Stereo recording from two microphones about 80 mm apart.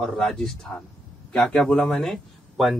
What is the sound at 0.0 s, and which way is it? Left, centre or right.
Speech, centre.